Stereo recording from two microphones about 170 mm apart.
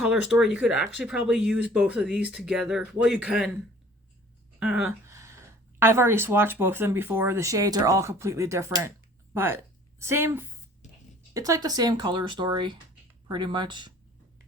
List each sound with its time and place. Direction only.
0.1 s speech: 5° right (ahead or behind)
4.6 s speech: 5° right (ahead or behind)
5.0 s a sound: 15° right (ahead or behind)
5.8 s speech: 15° right (ahead or behind)